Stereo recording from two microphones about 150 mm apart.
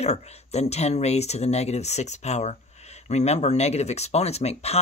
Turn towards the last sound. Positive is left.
turn(degrees=45)  # may be behind; listen again after turning